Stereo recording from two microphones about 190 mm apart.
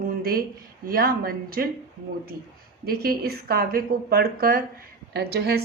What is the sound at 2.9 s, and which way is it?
A woman's voice, 55° right (ahead or behind).